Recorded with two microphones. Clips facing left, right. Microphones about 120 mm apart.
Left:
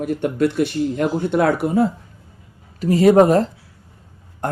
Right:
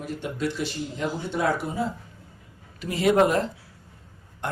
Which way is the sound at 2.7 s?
40° left (ahead or behind).